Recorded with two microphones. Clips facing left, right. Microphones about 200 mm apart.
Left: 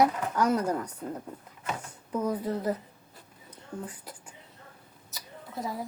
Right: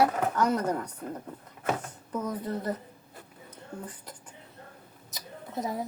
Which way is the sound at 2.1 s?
10° left (ahead or behind).